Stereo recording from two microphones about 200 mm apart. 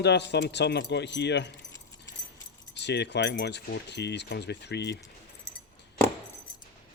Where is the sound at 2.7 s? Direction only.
60° left (ahead or behind).